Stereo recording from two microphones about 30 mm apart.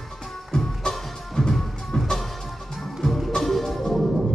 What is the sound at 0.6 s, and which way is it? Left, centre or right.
Music, centre.